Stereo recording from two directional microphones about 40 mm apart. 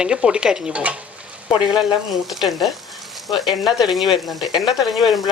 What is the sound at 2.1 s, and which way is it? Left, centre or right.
Speech, centre.